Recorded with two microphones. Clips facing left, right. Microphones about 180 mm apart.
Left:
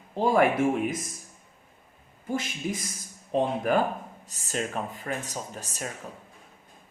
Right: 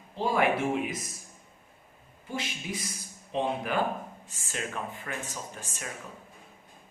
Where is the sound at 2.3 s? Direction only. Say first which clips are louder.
Left 5 dB; 50° left (ahead or behind).